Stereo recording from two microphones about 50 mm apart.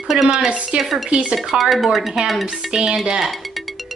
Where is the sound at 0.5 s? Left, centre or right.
Right.